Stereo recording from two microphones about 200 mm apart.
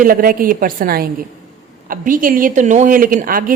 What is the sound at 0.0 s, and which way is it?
A woman's voice, 45° right (ahead or behind).